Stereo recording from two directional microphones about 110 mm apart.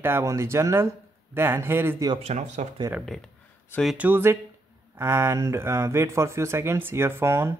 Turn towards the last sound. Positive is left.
turn(degrees=-25)  # may be behind; listen again after turning